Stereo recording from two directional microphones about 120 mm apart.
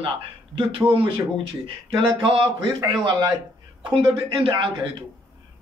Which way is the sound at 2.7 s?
35° right (ahead or behind).